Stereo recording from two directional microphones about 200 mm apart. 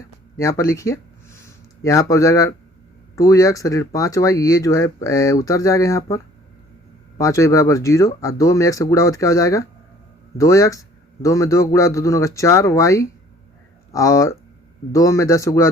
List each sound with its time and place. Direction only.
0.3 s speech: 15° left (ahead or behind)
7.2 s speech: 15° left (ahead or behind)